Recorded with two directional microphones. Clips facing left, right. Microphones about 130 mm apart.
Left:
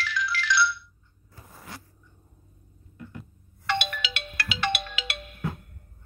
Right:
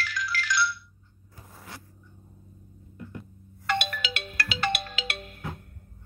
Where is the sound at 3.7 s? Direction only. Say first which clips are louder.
Even; 40° right (ahead or behind).